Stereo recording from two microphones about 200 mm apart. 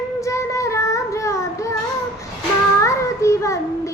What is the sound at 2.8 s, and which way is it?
Child singing, 15° left (ahead or behind).